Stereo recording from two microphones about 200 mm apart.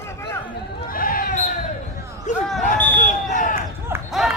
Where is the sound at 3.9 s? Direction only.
10° right (ahead or behind).